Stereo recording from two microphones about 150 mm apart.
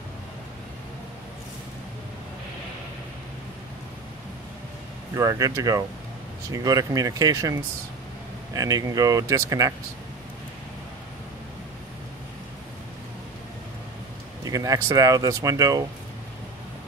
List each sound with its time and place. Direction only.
5.1 s speech: 25° right (ahead or behind)
8.5 s speech: 25° right (ahead or behind)
14.4 s speech: 25° right (ahead or behind)